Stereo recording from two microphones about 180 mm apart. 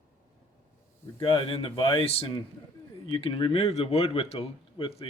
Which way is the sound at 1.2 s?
30° left (ahead or behind).